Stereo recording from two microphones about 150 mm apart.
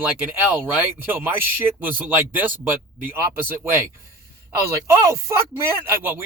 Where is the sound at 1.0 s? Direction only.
15° right (ahead or behind).